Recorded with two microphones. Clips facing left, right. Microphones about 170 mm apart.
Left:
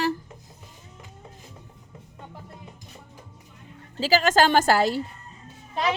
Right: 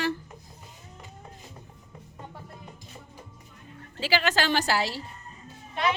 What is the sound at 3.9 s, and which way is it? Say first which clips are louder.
Speech: left 6 dB; 40° left (ahead or behind).